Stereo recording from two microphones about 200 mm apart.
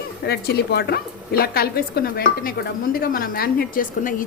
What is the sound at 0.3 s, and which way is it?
A woman's voice, 55° left (ahead or behind).